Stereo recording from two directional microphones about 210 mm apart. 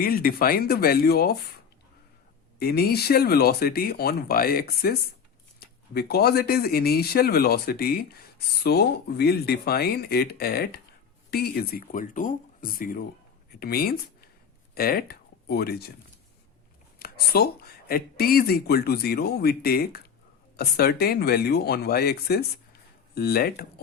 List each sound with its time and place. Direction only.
0.0 s speech: 45° left (ahead or behind)
2.6 s speech: 45° left (ahead or behind)
17.0 s speech: 45° left (ahead or behind)